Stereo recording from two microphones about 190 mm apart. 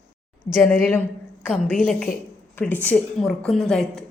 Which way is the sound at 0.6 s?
5° left (ahead or behind).